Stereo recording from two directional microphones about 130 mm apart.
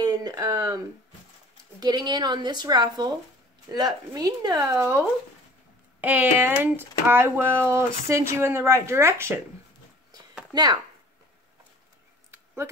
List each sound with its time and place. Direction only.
0.0 s a sound: 30° right (ahead or behind)
1.8 s a woman's voice: 30° right (ahead or behind)
10.5 s speech: 35° right (ahead or behind)